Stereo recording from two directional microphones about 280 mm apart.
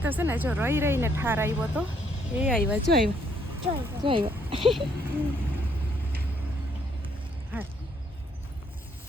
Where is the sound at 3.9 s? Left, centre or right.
Centre.